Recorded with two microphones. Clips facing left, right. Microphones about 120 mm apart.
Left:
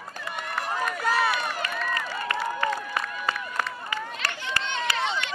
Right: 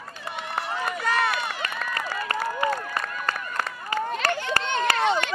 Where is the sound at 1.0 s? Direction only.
5° left (ahead or behind).